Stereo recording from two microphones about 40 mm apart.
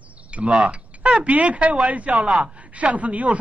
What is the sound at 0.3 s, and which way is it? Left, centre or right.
Speech, right.